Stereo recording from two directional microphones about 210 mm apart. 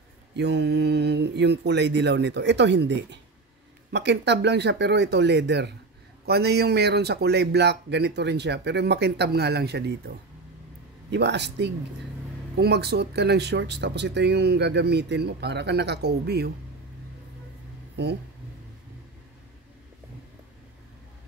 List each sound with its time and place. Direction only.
0.4 s speech: 55° right (ahead or behind)